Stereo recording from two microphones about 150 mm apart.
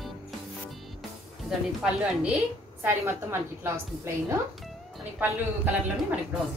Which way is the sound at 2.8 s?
15° right (ahead or behind).